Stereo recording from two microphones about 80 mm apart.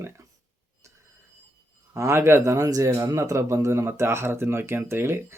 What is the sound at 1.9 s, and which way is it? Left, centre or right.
Speech, right.